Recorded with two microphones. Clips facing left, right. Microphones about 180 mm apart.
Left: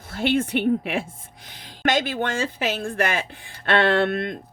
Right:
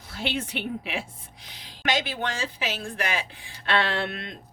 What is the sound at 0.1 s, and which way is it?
A woman's voice, 55° left (ahead or behind).